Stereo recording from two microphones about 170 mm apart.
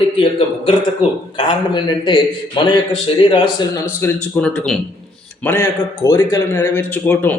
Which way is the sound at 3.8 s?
15° left (ahead or behind).